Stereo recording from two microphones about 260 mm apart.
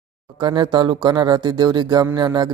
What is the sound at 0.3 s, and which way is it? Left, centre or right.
Speech, centre.